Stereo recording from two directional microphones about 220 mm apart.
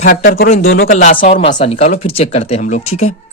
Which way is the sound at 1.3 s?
25° left (ahead or behind).